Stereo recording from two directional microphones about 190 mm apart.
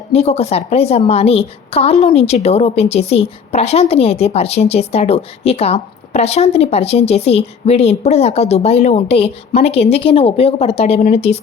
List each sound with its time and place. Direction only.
0.1 s a woman's voice: 35° left (ahead or behind)